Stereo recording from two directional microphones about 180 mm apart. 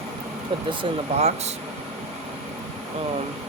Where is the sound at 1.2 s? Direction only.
35° right (ahead or behind).